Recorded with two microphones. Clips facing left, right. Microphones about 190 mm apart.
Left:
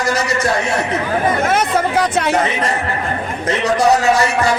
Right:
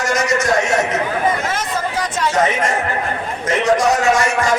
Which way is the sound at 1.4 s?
60° left (ahead or behind).